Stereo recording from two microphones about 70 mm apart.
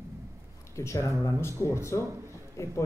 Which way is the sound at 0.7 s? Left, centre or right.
Left.